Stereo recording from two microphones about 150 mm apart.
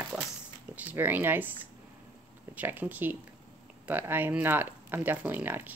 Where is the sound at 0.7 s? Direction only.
10° right (ahead or behind).